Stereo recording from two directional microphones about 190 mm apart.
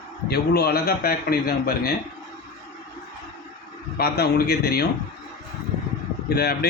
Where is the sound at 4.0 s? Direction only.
55° left (ahead or behind).